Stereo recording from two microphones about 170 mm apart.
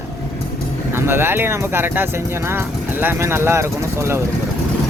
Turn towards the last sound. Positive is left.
turn(degrees=-15)  # may be behind; listen again after turning